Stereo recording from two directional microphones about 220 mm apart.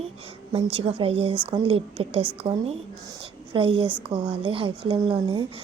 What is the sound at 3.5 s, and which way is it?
Speech, 25° right (ahead or behind).